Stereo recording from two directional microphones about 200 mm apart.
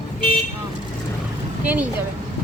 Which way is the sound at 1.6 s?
10° right (ahead or behind).